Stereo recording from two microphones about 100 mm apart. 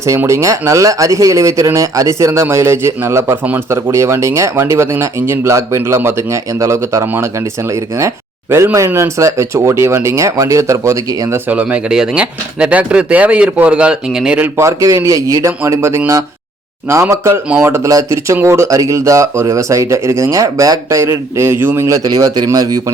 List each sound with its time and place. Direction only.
0.0 s speech: 30° right (ahead or behind)
11.4 s speech: 15° right (ahead or behind); by 22.8 s 35° right (ahead or behind)